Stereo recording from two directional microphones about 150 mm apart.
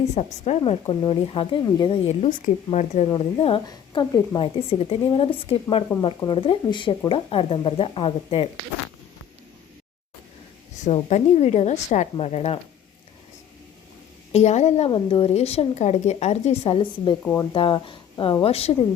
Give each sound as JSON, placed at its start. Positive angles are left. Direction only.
{"t": 0.1, "sound": "speech", "side_deg": 45}
{"t": 2.0, "sound": "speech", "side_deg": 55}
{"t": 3.1, "sound": "speech", "side_deg": 40}
{"t": 3.7, "sound": "a woman's voice", "side_deg": 25}
{"t": 4.4, "sound": "speech", "side_deg": 40}
{"t": 5.9, "sound": "speech", "side_deg": 15}
{"t": 6.2, "sound": "speech", "side_deg": 35}
{"t": 10.8, "sound": "speech", "side_deg": 45}
{"t": 14.3, "sound": "speech", "side_deg": 50}
{"t": 14.8, "sound": "speech", "side_deg": 35}